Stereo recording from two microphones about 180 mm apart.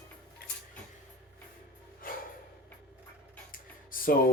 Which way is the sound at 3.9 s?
55° left (ahead or behind).